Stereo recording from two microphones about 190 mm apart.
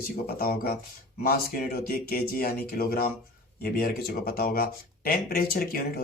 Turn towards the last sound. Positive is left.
turn(degrees=50)  # may be behind; listen again after turning